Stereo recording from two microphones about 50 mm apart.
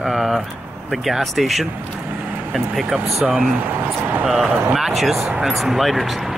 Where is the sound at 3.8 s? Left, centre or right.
Right.